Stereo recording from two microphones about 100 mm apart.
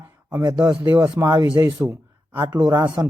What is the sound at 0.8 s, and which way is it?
Speech, 35° right (ahead or behind).